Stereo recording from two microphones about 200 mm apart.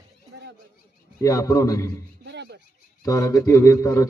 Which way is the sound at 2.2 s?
60° right (ahead or behind).